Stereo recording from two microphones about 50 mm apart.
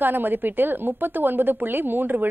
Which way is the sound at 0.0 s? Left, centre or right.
Right.